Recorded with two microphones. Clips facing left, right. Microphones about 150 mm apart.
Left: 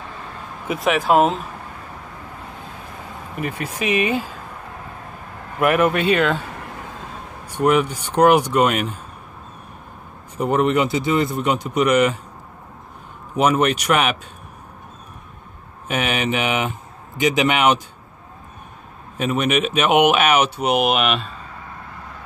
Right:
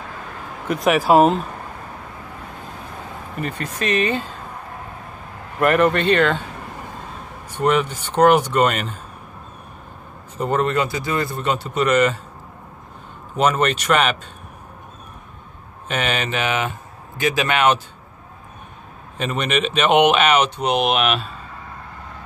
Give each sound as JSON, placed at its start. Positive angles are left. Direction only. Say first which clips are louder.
{"t": 0.7, "sound": "speech", "louder": "right 2 dB", "side_deg": 0}
{"t": 3.3, "sound": "speech", "louder": "left 1 dB", "side_deg": 10}
{"t": 5.6, "sound": "speech", "louder": "right 1 dB", "side_deg": 5}
{"t": 7.4, "sound": "speech", "louder": "left 2 dB", "side_deg": 10}
{"t": 10.3, "sound": "speech", "louder": "left 2 dB", "side_deg": 15}
{"t": 13.4, "sound": "speech", "louder": "left 1 dB", "side_deg": 10}
{"t": 15.9, "sound": "speech", "louder": "left 1 dB", "side_deg": 10}
{"t": 19.1, "sound": "speech", "louder": "left 2 dB", "side_deg": 10}